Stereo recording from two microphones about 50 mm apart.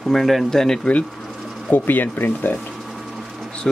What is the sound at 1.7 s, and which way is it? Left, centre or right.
Speech, left.